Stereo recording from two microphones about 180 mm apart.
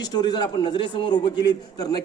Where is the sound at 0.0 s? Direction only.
25° left (ahead or behind).